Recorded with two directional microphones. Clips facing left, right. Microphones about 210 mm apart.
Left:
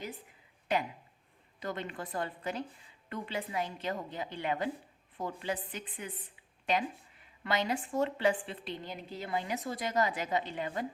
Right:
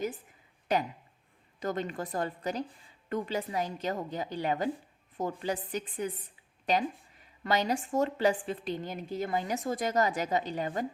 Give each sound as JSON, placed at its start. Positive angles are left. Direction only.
{"t": 1.5, "sound": "a woman's voice", "side_deg": -40}